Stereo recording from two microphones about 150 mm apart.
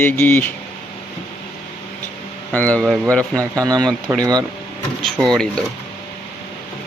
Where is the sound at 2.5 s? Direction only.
10° left (ahead or behind).